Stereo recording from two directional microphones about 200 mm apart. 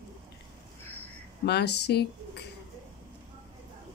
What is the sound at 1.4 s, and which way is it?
Speech, 55° left (ahead or behind).